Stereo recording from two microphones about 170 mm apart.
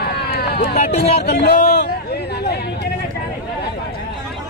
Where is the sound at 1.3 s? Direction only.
70° left (ahead or behind).